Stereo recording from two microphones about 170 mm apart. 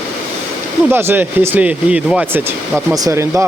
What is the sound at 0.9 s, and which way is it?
Speech, 15° right (ahead or behind).